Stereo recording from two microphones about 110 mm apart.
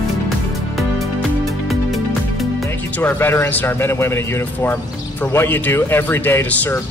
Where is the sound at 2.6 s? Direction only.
20° left (ahead or behind).